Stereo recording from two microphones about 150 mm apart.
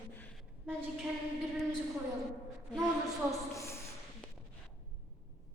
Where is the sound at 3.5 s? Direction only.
20° left (ahead or behind).